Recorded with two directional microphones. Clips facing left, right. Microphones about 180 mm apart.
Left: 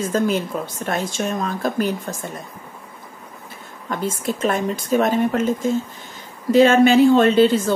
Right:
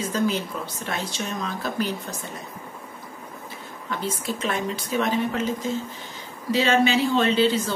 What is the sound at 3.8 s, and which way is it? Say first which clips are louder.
A woman's voice: left 5 dB; 45° left (ahead or behind).